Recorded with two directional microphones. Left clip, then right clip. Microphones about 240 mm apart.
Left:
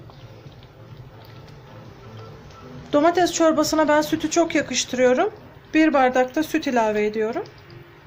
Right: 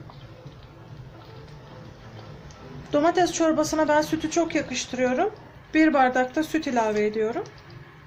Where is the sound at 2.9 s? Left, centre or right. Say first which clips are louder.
Left 3 dB; centre.